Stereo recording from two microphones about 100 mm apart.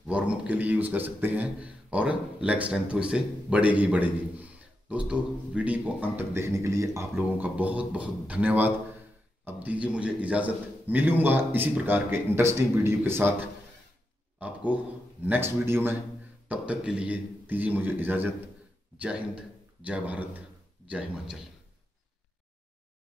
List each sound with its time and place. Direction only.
0.0 s a man's voice: 10° right (ahead or behind); by 7.1 s 30° right (ahead or behind)
7.2 s a man's voice: 15° right (ahead or behind)
14.4 s a sound: 15° right (ahead or behind)
15.2 s a man's voice: 20° right (ahead or behind)
16.4 s a man's voice: 10° right (ahead or behind)